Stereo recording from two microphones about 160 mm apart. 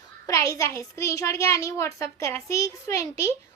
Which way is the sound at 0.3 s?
20° left (ahead or behind).